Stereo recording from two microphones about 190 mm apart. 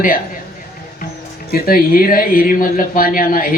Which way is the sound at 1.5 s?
50° left (ahead or behind).